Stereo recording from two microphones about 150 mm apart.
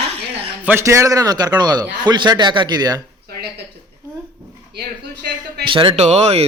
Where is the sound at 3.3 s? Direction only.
90° right.